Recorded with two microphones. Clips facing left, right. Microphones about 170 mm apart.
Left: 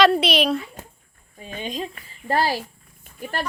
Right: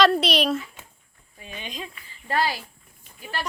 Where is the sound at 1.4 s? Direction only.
45° left (ahead or behind).